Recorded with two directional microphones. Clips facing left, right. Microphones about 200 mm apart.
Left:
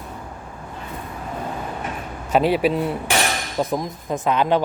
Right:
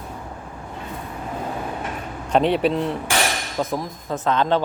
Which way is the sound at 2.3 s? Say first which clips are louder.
Even; 5° left (ahead or behind).